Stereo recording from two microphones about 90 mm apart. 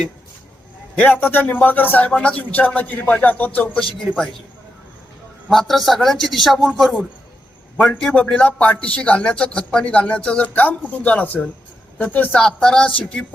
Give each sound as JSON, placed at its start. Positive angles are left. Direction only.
{"t": 1.0, "sound": "speech", "side_deg": 20}
{"t": 5.5, "sound": "a man's voice", "side_deg": 0}
{"t": 8.1, "sound": "speech", "side_deg": 15}